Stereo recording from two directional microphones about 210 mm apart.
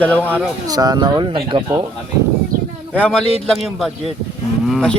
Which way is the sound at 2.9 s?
5° left (ahead or behind).